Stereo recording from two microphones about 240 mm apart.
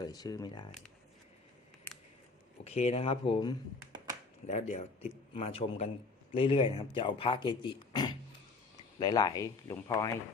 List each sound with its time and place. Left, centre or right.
0.0 s speech: centre
2.6 s speech: left
3.9 s a sound: centre
4.4 s speech: left